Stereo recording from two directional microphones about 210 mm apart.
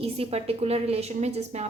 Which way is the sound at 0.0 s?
30° right (ahead or behind).